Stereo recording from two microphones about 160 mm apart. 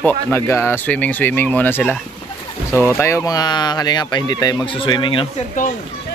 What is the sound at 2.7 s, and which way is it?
Speech, 15° right (ahead or behind).